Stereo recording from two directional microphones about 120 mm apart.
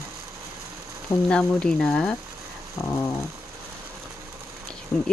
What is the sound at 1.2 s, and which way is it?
Speech, 10° left (ahead or behind).